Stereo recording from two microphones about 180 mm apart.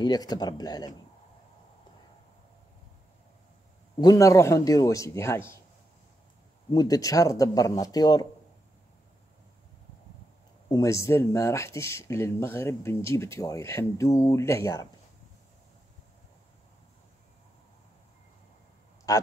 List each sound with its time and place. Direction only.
0.0 s speech: 20° left (ahead or behind)
4.0 s speech: 20° left (ahead or behind)
6.7 s speech: 20° left (ahead or behind)
10.7 s speech: 15° left (ahead or behind)
19.1 s speech: 15° left (ahead or behind)